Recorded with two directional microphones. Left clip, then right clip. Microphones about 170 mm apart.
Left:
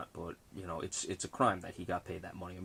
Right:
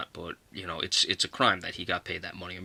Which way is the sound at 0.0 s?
20° right (ahead or behind).